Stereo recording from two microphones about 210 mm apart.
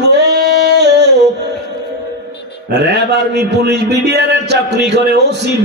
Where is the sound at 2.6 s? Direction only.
50° right (ahead or behind).